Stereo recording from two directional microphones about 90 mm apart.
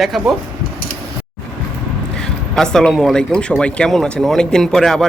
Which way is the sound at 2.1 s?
5° left (ahead or behind).